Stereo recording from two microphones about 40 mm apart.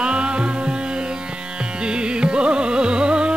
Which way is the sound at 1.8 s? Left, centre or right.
Right.